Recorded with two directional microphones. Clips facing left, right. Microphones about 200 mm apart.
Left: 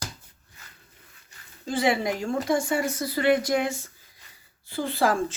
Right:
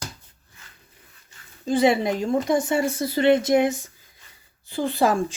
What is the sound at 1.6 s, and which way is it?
Speech, 20° right (ahead or behind).